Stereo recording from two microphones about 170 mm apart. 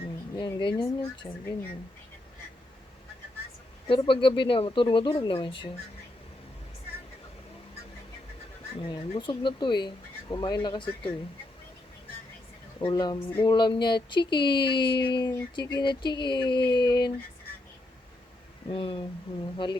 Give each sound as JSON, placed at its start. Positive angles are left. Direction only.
{"t": 0.3, "sound": "speech", "side_deg": 30}
{"t": 3.8, "sound": "speech", "side_deg": 30}
{"t": 8.8, "sound": "speech", "side_deg": 30}
{"t": 12.8, "sound": "speech", "side_deg": 25}
{"t": 18.7, "sound": "speech", "side_deg": 35}